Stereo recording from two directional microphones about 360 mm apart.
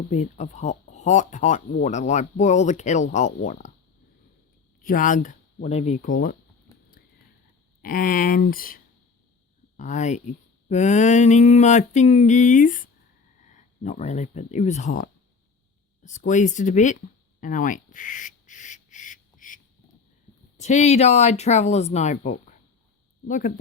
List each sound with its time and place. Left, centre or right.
0.1 s speech: centre
4.8 s speech: left
7.8 s speech: left
17.4 s a sound: left
20.6 s speech: centre